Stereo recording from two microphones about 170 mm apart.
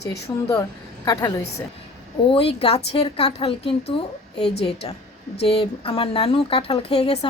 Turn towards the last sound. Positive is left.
turn(degrees=35)  # may be behind; listen again after turning